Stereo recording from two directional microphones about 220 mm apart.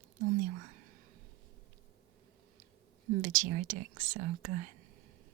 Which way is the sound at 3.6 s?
35° right (ahead or behind).